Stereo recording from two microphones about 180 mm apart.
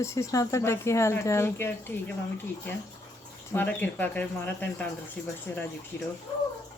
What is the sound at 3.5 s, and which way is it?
Speech, 10° left (ahead or behind).